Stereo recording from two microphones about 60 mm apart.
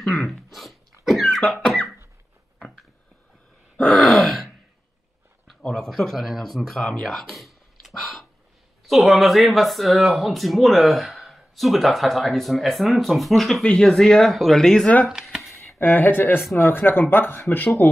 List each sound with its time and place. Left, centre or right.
0.0 s speech: centre
0.5 s sneeze: centre
1.2 s cough: centre
3.7 s grunt: centre
5.6 s speech: centre
7.0 s a sound: centre
8.8 s speech: centre
15.0 s a sound: centre
15.8 s speech: left